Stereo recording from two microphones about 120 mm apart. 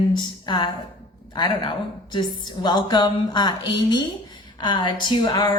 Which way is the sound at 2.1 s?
40° left (ahead or behind).